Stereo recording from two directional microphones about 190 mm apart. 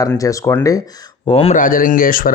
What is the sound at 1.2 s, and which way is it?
Speech, 30° left (ahead or behind).